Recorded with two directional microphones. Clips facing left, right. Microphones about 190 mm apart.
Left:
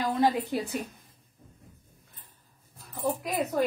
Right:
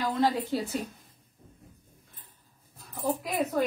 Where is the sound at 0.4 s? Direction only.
15° left (ahead or behind).